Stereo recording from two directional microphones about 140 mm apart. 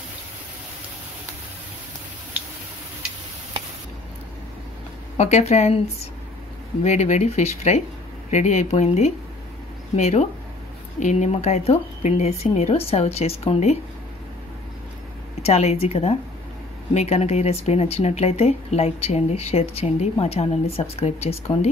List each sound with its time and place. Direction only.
5.1 s speech: 50° left (ahead or behind)
15.4 s speech: 50° left (ahead or behind)